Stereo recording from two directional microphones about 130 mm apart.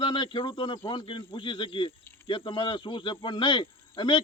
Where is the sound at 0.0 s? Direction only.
40° left (ahead or behind).